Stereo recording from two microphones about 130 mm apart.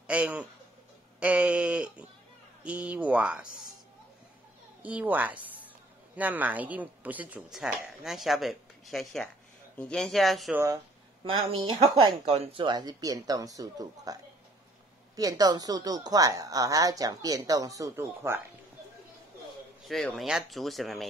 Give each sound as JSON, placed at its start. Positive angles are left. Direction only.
{"t": 0.0, "sound": "a man's voice", "side_deg": -10}
{"t": 4.8, "sound": "a woman's voice", "side_deg": -10}
{"t": 10.5, "sound": "speech", "side_deg": -25}
{"t": 11.2, "sound": "a woman's voice", "side_deg": -45}
{"t": 19.9, "sound": "speech", "side_deg": 0}